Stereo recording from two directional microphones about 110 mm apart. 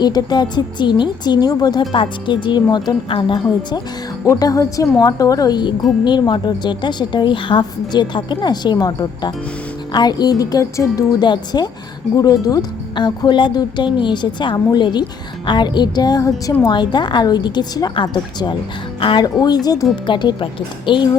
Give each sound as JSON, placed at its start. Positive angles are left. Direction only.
{"t": 0.0, "sound": "a woman's voice", "side_deg": 40}
{"t": 4.3, "sound": "a woman's voice", "side_deg": 30}